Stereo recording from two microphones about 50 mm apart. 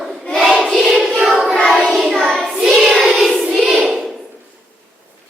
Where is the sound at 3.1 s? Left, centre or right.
Centre.